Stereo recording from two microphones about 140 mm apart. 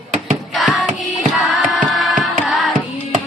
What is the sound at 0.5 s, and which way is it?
Music, centre (ahead or behind).